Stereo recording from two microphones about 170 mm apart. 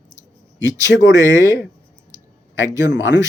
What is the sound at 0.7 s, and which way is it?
Speech, 20° right (ahead or behind).